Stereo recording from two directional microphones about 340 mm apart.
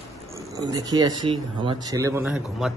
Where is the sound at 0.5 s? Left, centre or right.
Centre.